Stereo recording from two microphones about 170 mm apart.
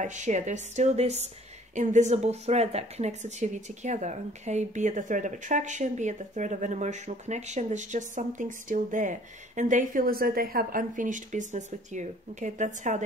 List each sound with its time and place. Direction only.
0.0 s speech: 45° right (ahead or behind)